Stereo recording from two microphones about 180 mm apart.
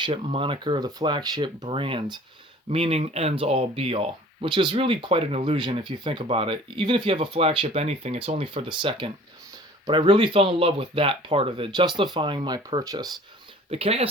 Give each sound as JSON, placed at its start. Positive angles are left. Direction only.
{"t": 0.0, "sound": "speech", "side_deg": -30}
{"t": 13.7, "sound": "speech", "side_deg": -30}